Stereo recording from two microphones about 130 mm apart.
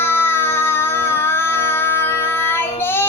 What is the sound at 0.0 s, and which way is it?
Music, 15° left (ahead or behind).